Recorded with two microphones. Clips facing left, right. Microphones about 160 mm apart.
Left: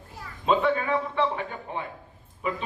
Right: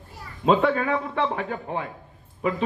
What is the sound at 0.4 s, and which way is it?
Speech, 50° right (ahead or behind).